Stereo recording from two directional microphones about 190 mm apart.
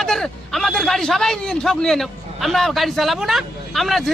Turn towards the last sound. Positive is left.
turn(degrees=0)  # may be behind; listen again after turning